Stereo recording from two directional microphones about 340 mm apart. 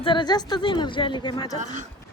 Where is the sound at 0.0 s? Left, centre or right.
Centre.